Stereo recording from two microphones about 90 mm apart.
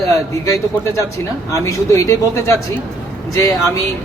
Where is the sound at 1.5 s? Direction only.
35° left (ahead or behind).